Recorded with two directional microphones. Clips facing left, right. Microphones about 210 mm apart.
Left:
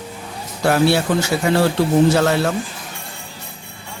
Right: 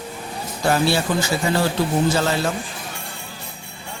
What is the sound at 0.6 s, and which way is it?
Speech, 65° left (ahead or behind).